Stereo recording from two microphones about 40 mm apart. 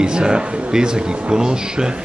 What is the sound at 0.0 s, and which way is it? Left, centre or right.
Speech, right.